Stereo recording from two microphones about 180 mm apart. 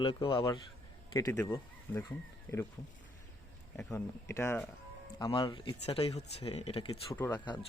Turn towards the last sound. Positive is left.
turn(degrees=10)  # may be behind; listen again after turning